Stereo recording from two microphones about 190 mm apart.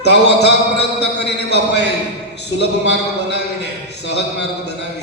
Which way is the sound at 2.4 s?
65° left (ahead or behind).